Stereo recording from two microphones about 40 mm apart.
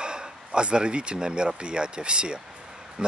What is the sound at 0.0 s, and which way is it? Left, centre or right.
Speech, right.